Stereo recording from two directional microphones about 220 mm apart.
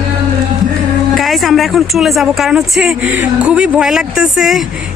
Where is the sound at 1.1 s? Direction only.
Centre (ahead or behind).